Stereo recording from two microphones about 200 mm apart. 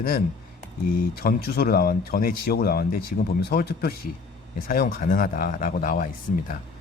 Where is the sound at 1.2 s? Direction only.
50° left (ahead or behind).